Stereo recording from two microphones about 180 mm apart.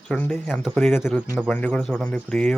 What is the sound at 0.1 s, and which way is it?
Speech, 5° left (ahead or behind).